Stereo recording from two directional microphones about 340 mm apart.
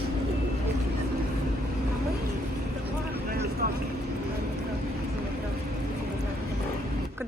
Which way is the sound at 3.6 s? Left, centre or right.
Right.